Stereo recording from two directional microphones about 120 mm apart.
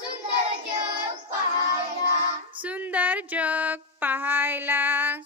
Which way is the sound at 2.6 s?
15° right (ahead or behind).